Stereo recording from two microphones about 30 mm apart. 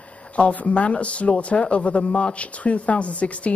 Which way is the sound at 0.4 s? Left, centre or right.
Left.